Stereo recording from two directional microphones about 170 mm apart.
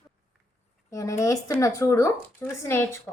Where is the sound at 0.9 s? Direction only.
20° left (ahead or behind).